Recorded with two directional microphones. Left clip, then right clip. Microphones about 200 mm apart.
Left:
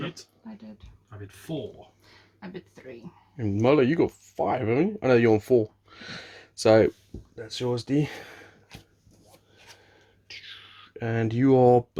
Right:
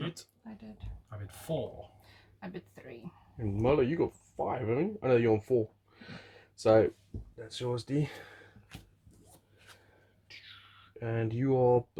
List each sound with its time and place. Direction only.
3.3 s speech: 45° left (ahead or behind)
10.2 s whispering: 45° left (ahead or behind)
11.0 s speech: 45° left (ahead or behind)